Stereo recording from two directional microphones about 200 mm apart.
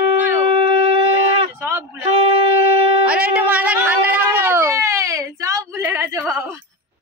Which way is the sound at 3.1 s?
5° right (ahead or behind).